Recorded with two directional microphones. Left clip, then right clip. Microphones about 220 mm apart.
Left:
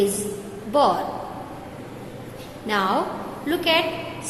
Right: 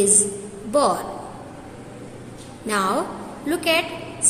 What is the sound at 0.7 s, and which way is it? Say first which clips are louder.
Speech: even; 30° right (ahead or behind).